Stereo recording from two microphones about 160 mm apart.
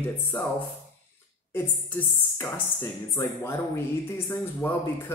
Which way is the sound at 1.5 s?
15° left (ahead or behind).